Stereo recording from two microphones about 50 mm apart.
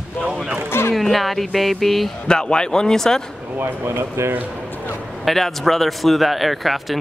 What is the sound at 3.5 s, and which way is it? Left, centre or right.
Speech, right.